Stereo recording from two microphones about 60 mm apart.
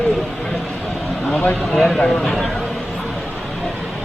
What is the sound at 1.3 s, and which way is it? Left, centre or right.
Speech, left.